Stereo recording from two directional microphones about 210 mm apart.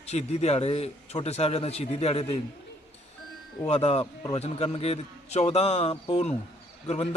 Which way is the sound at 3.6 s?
30° left (ahead or behind).